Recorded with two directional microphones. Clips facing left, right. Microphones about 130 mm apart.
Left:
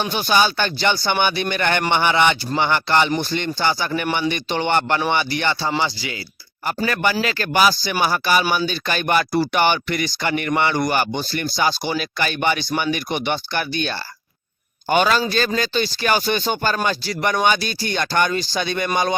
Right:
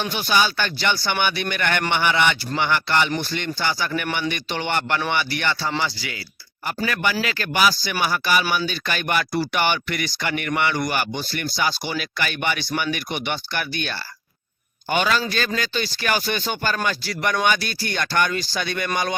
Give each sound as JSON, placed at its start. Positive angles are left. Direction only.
{"t": 0.0, "sound": "speech", "side_deg": 30}
{"t": 6.7, "sound": "speech", "side_deg": 35}